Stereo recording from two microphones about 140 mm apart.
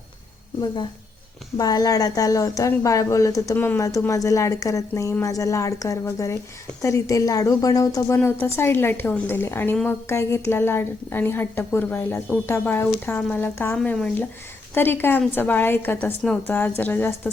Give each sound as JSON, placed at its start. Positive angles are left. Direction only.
{"t": 1.5, "sound": "a woman's voice", "side_deg": 25}